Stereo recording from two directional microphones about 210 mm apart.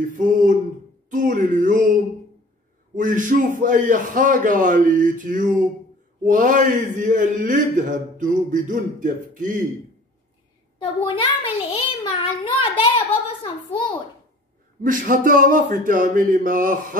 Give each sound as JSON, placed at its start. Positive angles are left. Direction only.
{"t": 0.1, "sound": "a man's voice", "side_deg": -40}
{"t": 11.1, "sound": "a child's voice", "side_deg": 25}
{"t": 14.8, "sound": "a man's voice", "side_deg": -40}